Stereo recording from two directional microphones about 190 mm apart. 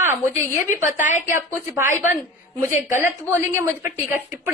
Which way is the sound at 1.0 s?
40° left (ahead or behind).